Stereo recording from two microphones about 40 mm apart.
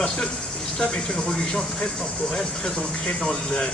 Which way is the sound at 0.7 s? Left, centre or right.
Centre.